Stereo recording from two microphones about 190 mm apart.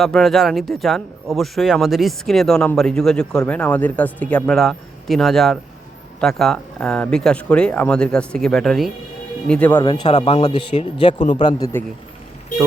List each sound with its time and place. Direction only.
0.0 s speech: centre (ahead or behind)
9.8 s speech: 25° left (ahead or behind)